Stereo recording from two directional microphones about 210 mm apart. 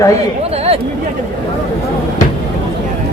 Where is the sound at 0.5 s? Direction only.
30° right (ahead or behind).